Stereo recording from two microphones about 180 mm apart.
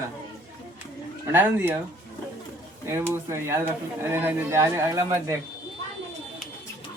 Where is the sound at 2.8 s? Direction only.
15° right (ahead or behind).